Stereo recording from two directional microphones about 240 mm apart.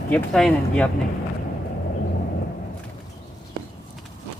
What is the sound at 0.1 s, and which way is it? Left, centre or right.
Speech, centre.